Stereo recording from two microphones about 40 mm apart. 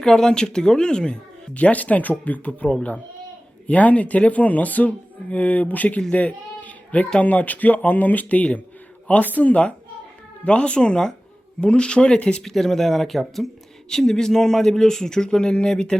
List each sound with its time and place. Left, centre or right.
0.0 s speech: centre
1.5 s speech: left
3.7 s speech: left
6.1 s a sound: left
7.2 s speech: left
12.4 s speech: centre
13.9 s speech: centre